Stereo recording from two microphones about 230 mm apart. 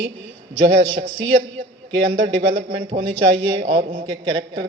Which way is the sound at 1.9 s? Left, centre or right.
Right.